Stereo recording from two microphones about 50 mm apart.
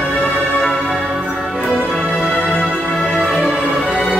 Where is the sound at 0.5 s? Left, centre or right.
Centre.